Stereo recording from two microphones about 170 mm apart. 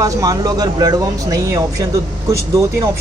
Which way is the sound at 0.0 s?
20° right (ahead or behind).